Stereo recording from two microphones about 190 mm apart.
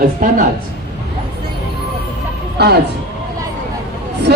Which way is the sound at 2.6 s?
60° right (ahead or behind).